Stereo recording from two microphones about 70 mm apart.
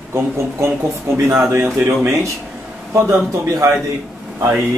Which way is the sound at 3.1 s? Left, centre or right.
Right.